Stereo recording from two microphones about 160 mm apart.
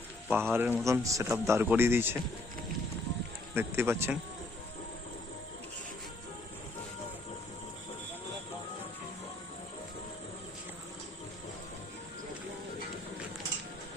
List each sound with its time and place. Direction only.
0.3 s speech: 15° right (ahead or behind)
3.5 s speech: 15° right (ahead or behind)